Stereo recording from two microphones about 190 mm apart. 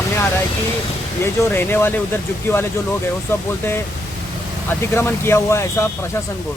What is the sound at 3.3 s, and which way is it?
Speech, 10° left (ahead or behind).